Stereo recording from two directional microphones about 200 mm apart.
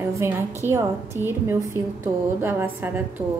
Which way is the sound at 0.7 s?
10° right (ahead or behind).